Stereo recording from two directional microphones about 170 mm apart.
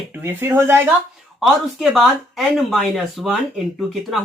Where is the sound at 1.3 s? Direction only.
Centre (ahead or behind).